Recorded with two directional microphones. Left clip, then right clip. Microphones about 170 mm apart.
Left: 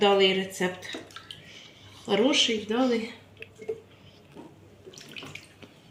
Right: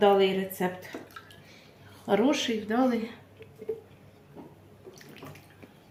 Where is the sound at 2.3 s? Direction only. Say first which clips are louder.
Left 4 dB; 30° right (ahead or behind).